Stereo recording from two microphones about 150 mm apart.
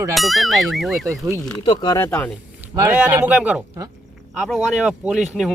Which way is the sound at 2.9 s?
10° right (ahead or behind).